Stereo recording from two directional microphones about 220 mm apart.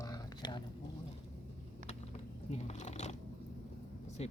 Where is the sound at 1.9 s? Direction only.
30° left (ahead or behind).